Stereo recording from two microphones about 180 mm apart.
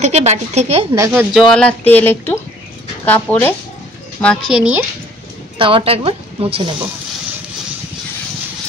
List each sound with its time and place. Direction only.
0.0 s a woman's voice: 40° right (ahead or behind)
0.9 s speech: 15° right (ahead or behind)
1.3 s a woman's voice: 5° left (ahead or behind)
5.6 s speech: 30° right (ahead or behind)